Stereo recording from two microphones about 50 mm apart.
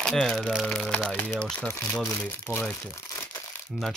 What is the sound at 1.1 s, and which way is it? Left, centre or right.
Speech, left.